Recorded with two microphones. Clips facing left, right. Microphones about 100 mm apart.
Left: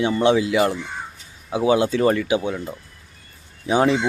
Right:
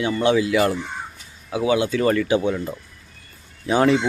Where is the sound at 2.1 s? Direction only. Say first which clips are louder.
Right 2 dB; 10° left (ahead or behind).